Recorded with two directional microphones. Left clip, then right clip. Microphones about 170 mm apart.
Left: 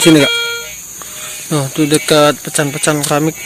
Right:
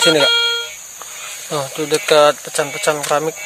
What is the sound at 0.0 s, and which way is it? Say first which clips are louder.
Speech: left 2 dB; 5° right (ahead or behind).